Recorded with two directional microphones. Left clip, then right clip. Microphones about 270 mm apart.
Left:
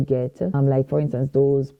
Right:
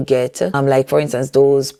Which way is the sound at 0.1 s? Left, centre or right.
Centre.